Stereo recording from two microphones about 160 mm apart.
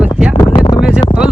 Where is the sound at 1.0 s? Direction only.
25° left (ahead or behind).